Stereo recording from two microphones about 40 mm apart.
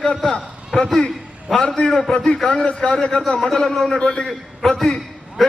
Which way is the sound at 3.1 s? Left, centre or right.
Centre.